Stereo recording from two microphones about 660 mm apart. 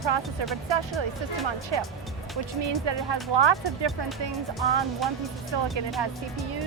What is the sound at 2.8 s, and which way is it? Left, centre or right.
Speech, right.